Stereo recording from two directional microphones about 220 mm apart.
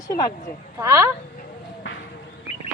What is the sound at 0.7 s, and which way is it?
Speech, 10° right (ahead or behind).